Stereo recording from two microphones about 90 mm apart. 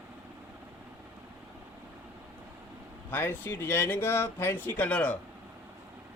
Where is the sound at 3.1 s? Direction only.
25° left (ahead or behind).